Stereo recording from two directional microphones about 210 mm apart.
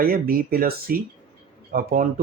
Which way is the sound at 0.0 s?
45° right (ahead or behind).